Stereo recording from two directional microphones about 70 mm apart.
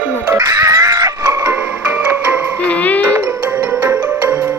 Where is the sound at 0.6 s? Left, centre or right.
Right.